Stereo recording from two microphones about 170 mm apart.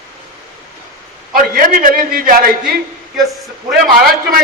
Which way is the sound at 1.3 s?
55° right (ahead or behind).